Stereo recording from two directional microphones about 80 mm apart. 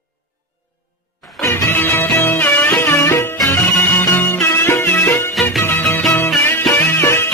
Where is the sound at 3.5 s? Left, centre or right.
Left.